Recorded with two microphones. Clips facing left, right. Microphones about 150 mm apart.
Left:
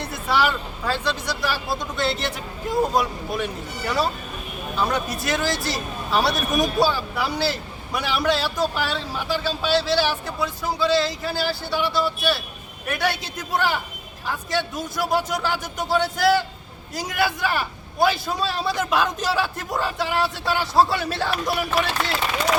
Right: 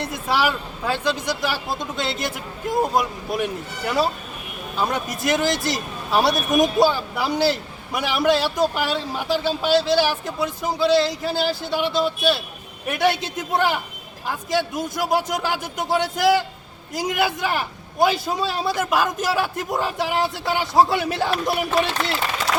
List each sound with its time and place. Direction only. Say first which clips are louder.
0.0 s a man's voice: even; 15° right (ahead or behind)
2.9 s a man's voice: right 1 dB; 10° right (ahead or behind)